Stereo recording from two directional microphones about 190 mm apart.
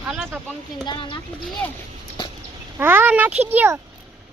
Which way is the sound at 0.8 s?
25° left (ahead or behind).